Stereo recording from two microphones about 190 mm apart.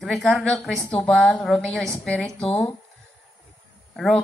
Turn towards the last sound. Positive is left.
turn(degrees=0)  # may be behind; listen again after turning